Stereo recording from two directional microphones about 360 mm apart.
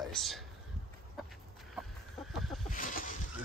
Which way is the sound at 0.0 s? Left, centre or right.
Centre.